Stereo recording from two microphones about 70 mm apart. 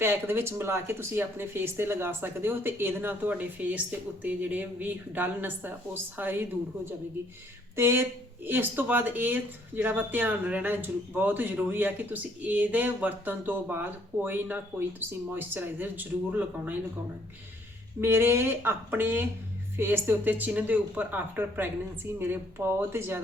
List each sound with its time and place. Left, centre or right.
0.0 s speech: right
7.8 s speech: right
18.0 s speech: right